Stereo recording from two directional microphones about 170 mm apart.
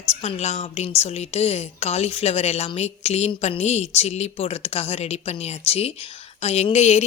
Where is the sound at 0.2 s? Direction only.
40° left (ahead or behind).